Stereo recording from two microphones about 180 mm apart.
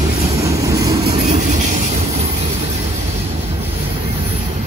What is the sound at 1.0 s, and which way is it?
Train, 35° right (ahead or behind).